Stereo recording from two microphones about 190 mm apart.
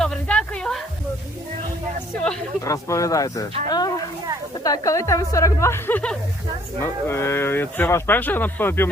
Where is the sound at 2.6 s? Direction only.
15° left (ahead or behind).